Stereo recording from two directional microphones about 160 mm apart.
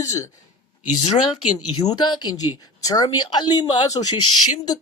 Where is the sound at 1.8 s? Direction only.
25° left (ahead or behind).